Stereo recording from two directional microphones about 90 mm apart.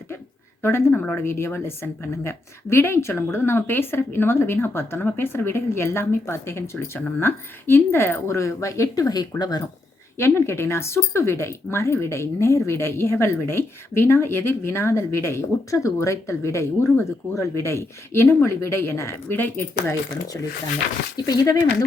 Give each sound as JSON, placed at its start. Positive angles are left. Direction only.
{"t": 0.6, "sound": "a woman's voice", "side_deg": 25}
{"t": 10.2, "sound": "speech", "side_deg": 30}
{"t": 21.2, "sound": "speech", "side_deg": 45}